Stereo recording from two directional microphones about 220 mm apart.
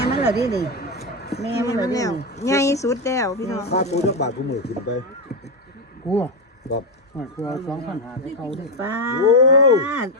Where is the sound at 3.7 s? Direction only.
30° left (ahead or behind).